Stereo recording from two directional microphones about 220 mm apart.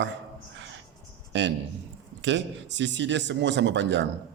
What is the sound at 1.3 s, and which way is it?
A man's voice, 55° right (ahead or behind).